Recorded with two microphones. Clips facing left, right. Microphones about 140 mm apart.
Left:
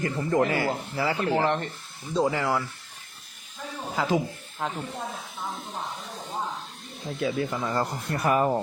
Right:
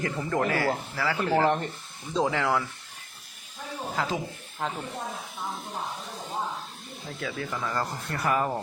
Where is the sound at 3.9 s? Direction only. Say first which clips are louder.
Left 5 dB; 5° left (ahead or behind).